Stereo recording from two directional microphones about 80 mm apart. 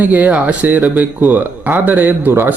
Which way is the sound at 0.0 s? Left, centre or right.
Right.